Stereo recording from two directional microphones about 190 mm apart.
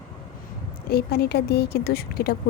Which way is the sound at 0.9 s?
55° left (ahead or behind).